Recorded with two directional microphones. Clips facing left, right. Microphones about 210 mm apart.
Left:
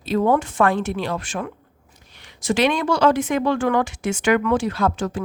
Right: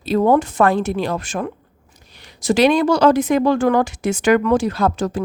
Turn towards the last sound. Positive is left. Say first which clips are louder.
# right 3 dB
turn(degrees=-40)  # may be behind; listen again after turning